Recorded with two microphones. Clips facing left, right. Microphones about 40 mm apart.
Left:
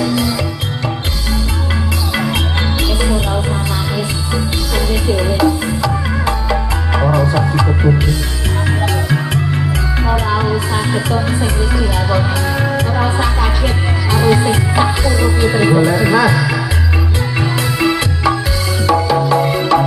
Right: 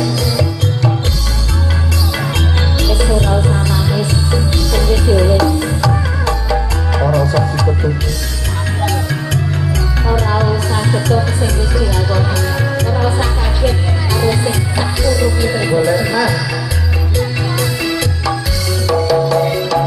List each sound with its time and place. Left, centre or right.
0.0 s music: left
2.9 s music: centre